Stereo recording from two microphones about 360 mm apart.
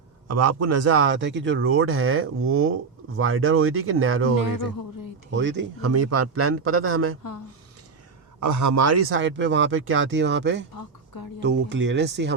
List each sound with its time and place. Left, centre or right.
0.3 s speech: right
5.3 s speech: right
8.4 s speech: right